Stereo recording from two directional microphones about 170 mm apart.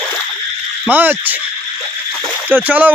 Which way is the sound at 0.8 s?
10° right (ahead or behind).